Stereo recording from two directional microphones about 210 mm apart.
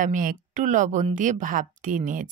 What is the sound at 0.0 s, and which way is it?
A woman's voice, 40° right (ahead or behind).